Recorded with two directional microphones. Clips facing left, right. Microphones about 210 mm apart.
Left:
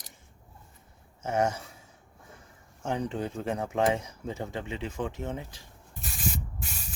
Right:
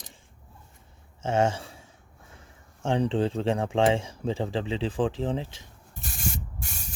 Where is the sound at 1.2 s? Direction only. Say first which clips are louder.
Right 3 dB; 25° right (ahead or behind).